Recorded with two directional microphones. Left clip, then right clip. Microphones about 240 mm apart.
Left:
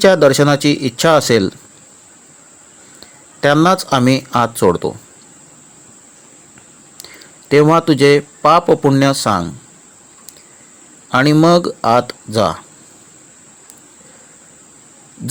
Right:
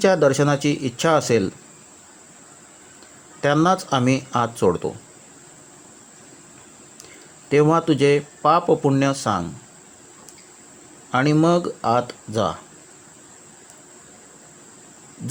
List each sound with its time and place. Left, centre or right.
0.0 s speech: centre
3.4 s speech: centre
7.5 s speech: left
11.1 s speech: centre